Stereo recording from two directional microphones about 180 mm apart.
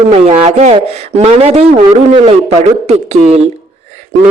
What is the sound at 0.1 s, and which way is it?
A man's voice, 35° right (ahead or behind).